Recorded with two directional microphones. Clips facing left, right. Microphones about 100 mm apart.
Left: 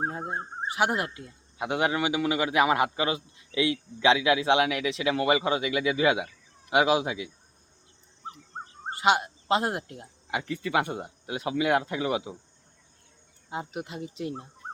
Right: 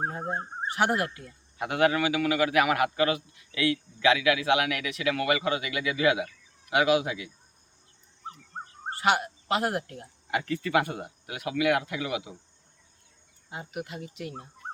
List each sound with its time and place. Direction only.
0.0 s speech: 5° left (ahead or behind); by 7.3 s 25° left (ahead or behind)
8.9 s speech: 20° left (ahead or behind)
13.5 s speech: 25° left (ahead or behind)